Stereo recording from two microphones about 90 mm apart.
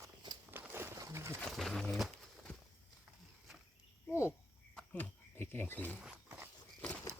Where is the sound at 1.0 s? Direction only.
35° right (ahead or behind).